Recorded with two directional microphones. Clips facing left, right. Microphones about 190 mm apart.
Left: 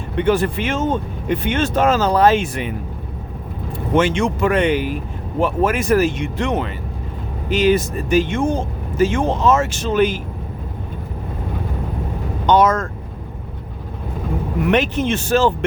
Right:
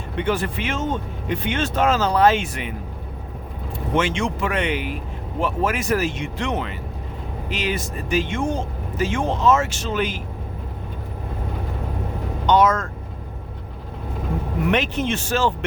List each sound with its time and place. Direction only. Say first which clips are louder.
0.2 s speech: left 6 dB; 45° left (ahead or behind)
3.9 s speech: left 5 dB; 50° left (ahead or behind)
12.5 s speech: left 3 dB; 45° left (ahead or behind)
14.7 s speech: left 4 dB; 50° left (ahead or behind)